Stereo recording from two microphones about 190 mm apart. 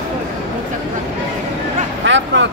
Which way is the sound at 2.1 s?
75° right (ahead or behind).